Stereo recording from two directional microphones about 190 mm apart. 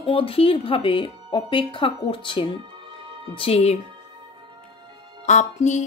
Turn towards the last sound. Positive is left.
turn(degrees=40)  # may be behind; listen again after turning